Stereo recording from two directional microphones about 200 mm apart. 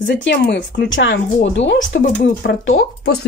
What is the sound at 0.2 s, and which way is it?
Speech, 65° left (ahead or behind).